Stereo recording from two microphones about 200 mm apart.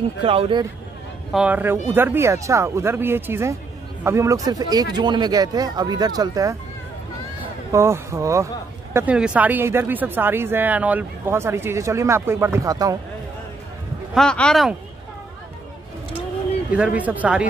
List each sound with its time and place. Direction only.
0.2 s speech: 25° right (ahead or behind)
1.3 s speech: 5° right (ahead or behind)
7.7 s speech: 15° right (ahead or behind)
14.1 s speech: 5° left (ahead or behind)
16.7 s speech: 5° right (ahead or behind)